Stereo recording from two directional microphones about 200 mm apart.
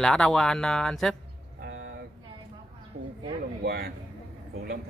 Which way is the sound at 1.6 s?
65° right (ahead or behind).